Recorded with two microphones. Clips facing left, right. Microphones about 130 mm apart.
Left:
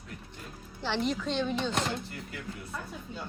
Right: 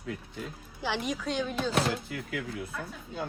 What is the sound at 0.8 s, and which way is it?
Speech, 10° right (ahead or behind).